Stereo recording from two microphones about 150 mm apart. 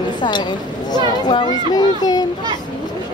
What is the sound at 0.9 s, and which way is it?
Speech, 30° left (ahead or behind).